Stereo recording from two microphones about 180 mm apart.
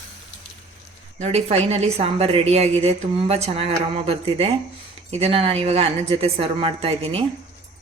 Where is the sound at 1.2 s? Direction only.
35° right (ahead or behind).